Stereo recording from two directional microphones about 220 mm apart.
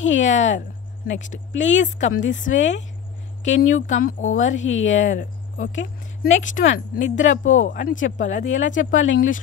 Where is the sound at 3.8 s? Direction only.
60° left (ahead or behind).